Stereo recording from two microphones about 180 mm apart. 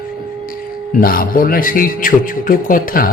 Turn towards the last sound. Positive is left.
turn(degrees=50)  # may be behind; listen again after turning